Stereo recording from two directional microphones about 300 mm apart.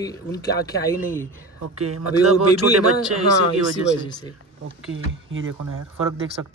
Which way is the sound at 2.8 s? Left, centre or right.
Right.